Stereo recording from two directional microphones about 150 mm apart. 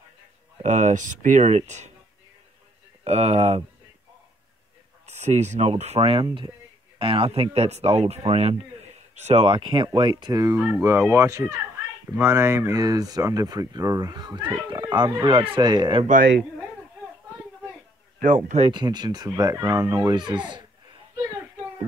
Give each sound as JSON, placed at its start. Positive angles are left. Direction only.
{"t": 0.6, "sound": "speech", "side_deg": -50}
{"t": 3.0, "sound": "speech", "side_deg": -45}
{"t": 5.0, "sound": "speech", "side_deg": -50}
{"t": 16.1, "sound": "a woman's voice", "side_deg": -65}
{"t": 18.2, "sound": "speech", "side_deg": -55}
{"t": 18.7, "sound": "speech", "side_deg": -30}